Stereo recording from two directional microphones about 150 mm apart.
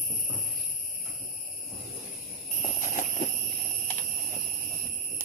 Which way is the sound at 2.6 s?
55° left (ahead or behind).